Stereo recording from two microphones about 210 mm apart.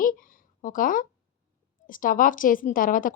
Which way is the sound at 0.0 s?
40° left (ahead or behind).